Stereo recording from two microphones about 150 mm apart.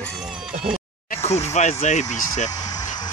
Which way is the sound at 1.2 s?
45° left (ahead or behind).